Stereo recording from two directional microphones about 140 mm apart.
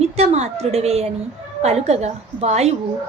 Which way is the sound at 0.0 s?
50° right (ahead or behind).